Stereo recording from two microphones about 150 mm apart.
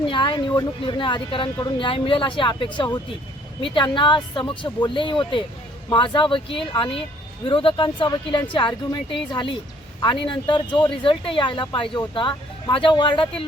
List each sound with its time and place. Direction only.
0.1 s speech: 30° left (ahead or behind)